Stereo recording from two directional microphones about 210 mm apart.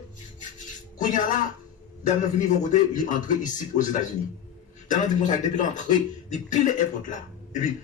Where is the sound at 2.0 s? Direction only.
35° left (ahead or behind).